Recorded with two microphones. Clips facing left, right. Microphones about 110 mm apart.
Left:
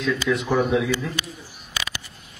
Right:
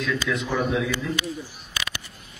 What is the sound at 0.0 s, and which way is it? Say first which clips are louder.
Speech: left 3 dB; 20° left (ahead or behind).